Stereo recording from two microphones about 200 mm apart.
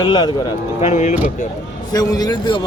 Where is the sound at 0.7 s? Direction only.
35° left (ahead or behind).